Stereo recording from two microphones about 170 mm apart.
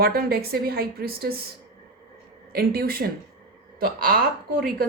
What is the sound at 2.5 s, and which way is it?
A woman's voice, 65° right (ahead or behind).